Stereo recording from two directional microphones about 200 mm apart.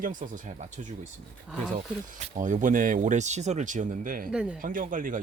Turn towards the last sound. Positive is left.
turn(degrees=-40)  # may be behind; listen again after turning